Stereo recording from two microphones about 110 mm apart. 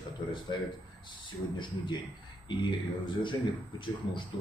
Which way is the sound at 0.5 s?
40° left (ahead or behind).